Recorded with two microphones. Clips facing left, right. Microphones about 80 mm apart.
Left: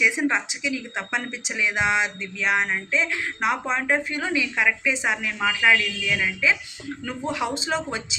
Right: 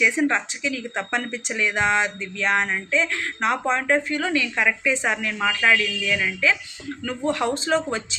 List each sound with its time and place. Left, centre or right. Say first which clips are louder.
0.0 s speech: right 2 dB; centre